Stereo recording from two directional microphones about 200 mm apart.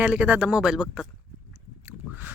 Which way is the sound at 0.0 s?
5° right (ahead or behind).